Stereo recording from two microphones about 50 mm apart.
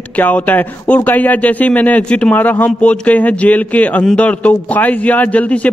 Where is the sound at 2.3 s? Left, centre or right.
Left.